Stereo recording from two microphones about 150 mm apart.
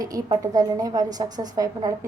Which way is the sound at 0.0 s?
25° right (ahead or behind).